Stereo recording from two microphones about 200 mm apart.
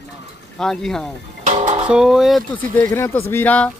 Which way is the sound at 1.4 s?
35° right (ahead or behind).